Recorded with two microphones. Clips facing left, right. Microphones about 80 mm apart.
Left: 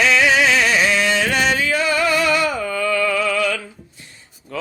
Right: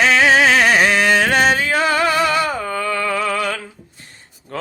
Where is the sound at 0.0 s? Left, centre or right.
Right.